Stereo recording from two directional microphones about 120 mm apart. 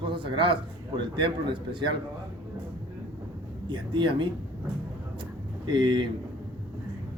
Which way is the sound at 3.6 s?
40° right (ahead or behind).